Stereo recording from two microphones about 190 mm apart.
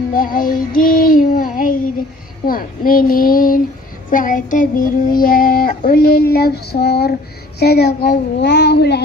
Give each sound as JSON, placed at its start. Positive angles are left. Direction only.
{"t": 0.1, "sound": "child singing", "side_deg": 45}